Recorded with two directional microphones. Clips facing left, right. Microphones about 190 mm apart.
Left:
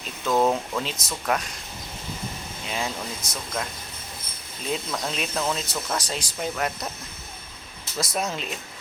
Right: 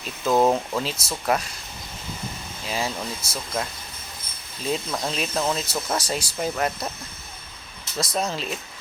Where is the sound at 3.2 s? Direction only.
15° left (ahead or behind).